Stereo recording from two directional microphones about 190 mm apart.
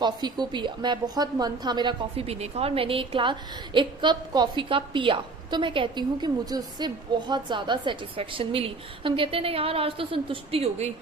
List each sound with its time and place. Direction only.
0.0 s a woman's voice: 20° right (ahead or behind)